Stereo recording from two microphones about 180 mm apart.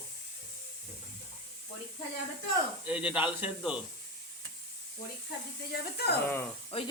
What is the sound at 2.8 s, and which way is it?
Speech, 10° right (ahead or behind).